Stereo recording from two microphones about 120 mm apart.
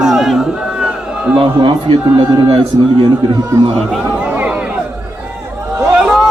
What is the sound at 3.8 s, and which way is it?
Speech, 5° right (ahead or behind).